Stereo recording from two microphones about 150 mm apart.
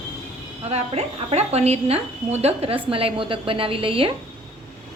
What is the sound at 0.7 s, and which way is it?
A woman's voice, 45° right (ahead or behind).